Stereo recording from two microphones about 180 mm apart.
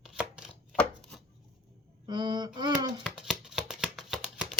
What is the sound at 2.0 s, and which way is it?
Speech, 25° right (ahead or behind).